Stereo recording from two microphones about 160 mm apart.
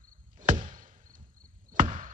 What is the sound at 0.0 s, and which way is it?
Chop, 55° right (ahead or behind).